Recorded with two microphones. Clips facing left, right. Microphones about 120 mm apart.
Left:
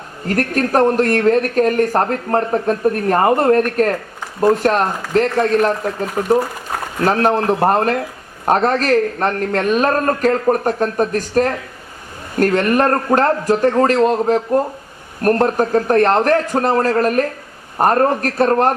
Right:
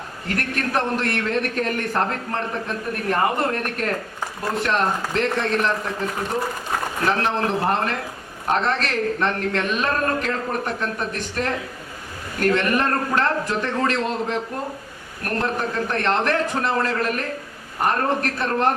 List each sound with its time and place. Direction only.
0.3 s speech: 40° left (ahead or behind)
7.0 s speech: 45° left (ahead or behind)